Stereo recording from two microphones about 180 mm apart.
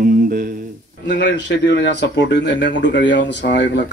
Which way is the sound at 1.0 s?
75° left (ahead or behind).